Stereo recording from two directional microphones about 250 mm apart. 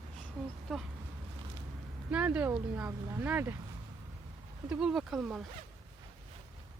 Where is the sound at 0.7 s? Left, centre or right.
Centre.